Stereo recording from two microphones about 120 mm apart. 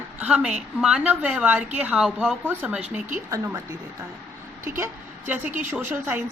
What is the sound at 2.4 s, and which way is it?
Speech, 15° right (ahead or behind).